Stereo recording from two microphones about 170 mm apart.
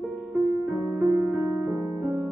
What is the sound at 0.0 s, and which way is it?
Music, centre (ahead or behind).